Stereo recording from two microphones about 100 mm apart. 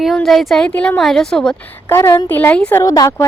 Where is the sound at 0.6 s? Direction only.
15° left (ahead or behind).